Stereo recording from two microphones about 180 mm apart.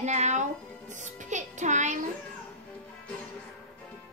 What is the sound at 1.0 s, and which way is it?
Music, 40° right (ahead or behind).